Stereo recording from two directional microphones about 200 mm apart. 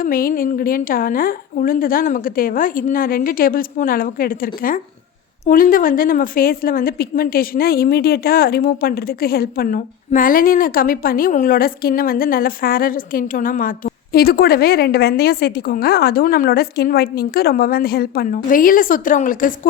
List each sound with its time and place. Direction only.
0.0 s a woman's voice: 45° left (ahead or behind)